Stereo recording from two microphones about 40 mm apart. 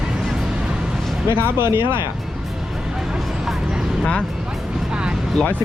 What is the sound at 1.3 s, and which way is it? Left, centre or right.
Speech, right.